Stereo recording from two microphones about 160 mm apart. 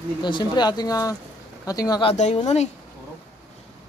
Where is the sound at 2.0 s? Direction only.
45° left (ahead or behind).